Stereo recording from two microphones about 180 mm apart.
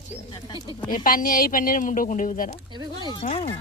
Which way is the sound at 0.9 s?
50° left (ahead or behind).